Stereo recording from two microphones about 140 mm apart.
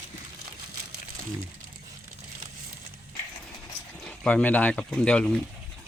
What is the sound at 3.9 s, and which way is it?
Speech, 10° left (ahead or behind).